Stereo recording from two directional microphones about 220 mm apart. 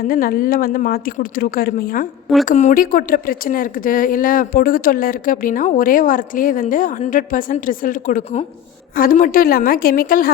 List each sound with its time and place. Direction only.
0.1 s speech: 40° left (ahead or behind)